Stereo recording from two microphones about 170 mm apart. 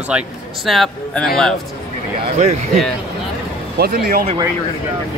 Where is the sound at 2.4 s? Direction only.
40° right (ahead or behind).